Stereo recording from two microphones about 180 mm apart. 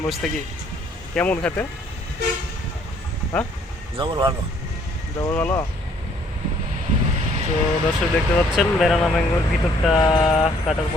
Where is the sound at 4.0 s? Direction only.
25° right (ahead or behind).